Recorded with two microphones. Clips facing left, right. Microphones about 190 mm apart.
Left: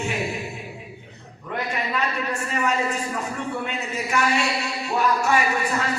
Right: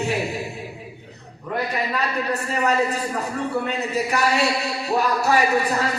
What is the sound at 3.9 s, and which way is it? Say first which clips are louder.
Speech: right 2 dB; 35° right (ahead or behind).